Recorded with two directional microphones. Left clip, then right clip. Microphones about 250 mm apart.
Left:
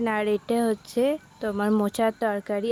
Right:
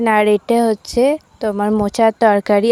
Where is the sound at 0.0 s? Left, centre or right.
Right.